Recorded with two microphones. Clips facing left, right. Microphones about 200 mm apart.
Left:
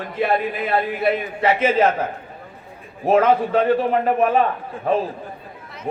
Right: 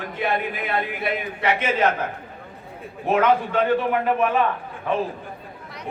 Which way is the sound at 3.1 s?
35° left (ahead or behind).